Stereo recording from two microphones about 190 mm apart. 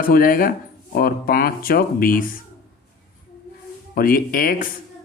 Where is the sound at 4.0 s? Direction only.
50° left (ahead or behind).